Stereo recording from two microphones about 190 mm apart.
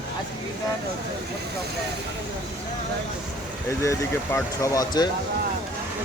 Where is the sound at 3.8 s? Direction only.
15° left (ahead or behind).